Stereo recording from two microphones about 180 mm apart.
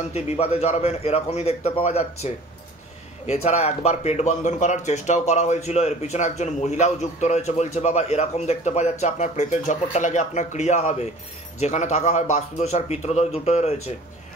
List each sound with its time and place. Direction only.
0.1 s speech: 35° left (ahead or behind)